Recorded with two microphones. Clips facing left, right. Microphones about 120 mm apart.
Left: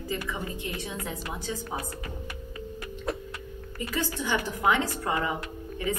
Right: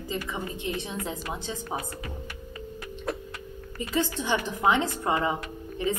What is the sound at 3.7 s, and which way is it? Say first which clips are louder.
A woman's voice: right 3 dB; 20° right (ahead or behind).